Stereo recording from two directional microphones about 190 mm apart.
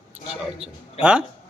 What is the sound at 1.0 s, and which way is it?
Speech, 30° left (ahead or behind).